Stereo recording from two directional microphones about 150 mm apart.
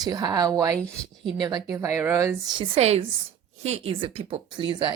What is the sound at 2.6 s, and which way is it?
A woman's voice, 45° right (ahead or behind).